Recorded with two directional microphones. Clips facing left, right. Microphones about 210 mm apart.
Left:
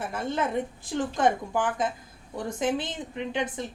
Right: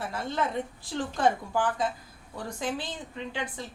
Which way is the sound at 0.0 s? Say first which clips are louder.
Left 2 dB; 20° left (ahead or behind).